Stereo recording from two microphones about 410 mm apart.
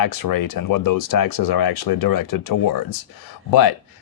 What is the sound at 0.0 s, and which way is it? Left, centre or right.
Speech, left.